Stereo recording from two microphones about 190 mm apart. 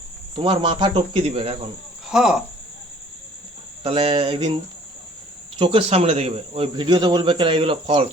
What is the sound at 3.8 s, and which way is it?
Speech, 30° right (ahead or behind).